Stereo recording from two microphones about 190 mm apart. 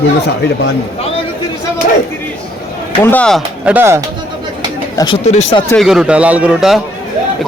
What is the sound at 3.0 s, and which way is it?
Speech, 5° left (ahead or behind).